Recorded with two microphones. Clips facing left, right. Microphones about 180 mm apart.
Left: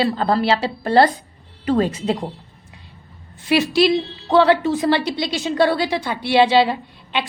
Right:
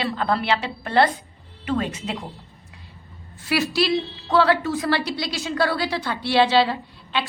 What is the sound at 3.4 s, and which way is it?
A woman's voice, 20° left (ahead or behind).